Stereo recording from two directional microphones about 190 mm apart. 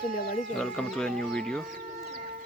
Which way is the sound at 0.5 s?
5° left (ahead or behind).